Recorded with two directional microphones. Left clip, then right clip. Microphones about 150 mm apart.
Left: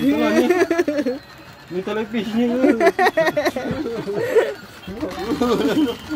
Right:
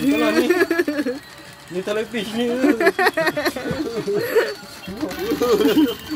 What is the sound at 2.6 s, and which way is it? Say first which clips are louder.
Speech: left 1 dB; centre (ahead or behind).